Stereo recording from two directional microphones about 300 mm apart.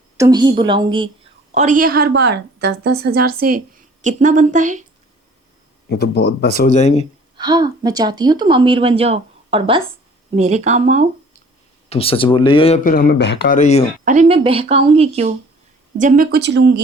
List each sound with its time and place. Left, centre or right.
0.2 s a woman's voice: centre
5.9 s speech: left
7.3 s a woman's voice: centre
11.9 s speech: centre
14.0 s a woman's voice: right